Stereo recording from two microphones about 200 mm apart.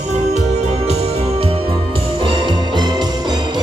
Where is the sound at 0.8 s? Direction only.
30° right (ahead or behind).